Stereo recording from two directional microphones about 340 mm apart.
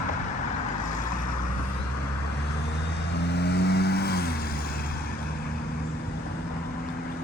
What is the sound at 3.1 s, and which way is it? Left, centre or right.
Vehicle, left.